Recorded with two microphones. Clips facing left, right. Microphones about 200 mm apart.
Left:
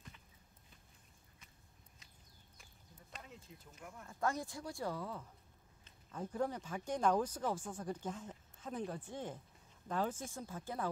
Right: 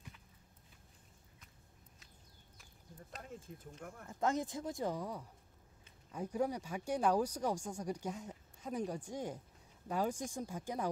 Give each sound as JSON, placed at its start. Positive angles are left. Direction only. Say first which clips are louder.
{"t": 3.2, "sound": "speech", "louder": "right 5 dB", "side_deg": -50}
{"t": 4.1, "sound": "speech", "louder": "right 3 dB", "side_deg": -20}